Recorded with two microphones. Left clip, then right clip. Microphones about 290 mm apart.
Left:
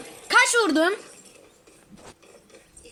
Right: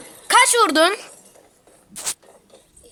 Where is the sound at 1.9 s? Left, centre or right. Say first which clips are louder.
Right 17 dB; right.